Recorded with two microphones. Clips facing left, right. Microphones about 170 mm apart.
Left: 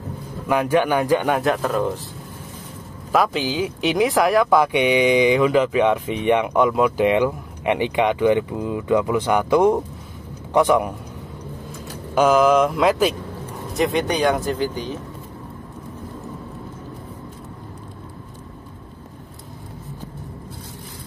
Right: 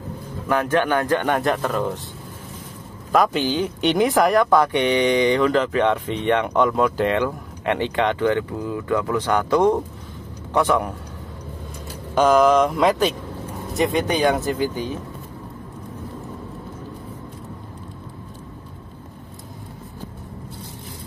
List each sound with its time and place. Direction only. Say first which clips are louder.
0.5 s speech: left 1 dB; 10° left (ahead or behind)
3.1 s speech: right 1 dB; 5° left (ahead or behind)
12.2 s speech: even; 5° left (ahead or behind)